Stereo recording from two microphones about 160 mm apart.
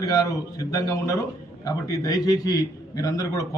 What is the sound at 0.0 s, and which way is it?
A man's voice, 20° left (ahead or behind).